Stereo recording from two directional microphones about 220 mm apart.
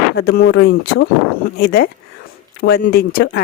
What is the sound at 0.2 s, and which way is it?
Speech, 45° left (ahead or behind).